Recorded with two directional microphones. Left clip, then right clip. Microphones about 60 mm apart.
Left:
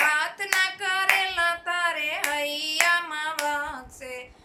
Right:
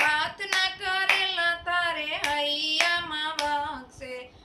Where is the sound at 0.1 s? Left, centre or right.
Left.